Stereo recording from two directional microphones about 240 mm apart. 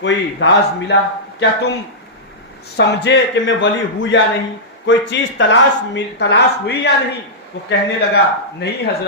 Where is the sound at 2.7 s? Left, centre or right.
Left.